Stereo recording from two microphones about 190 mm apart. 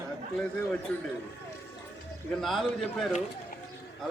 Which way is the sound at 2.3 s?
Centre (ahead or behind).